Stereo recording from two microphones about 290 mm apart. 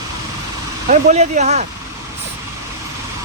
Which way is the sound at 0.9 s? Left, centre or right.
Right.